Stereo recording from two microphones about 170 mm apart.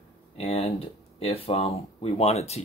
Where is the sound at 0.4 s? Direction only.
35° left (ahead or behind).